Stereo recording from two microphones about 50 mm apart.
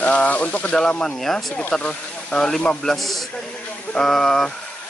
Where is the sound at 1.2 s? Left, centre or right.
Centre.